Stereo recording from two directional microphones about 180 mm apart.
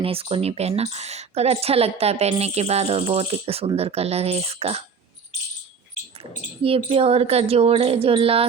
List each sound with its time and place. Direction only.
0.0 s speech: 30° right (ahead or behind)
6.6 s speech: 30° right (ahead or behind)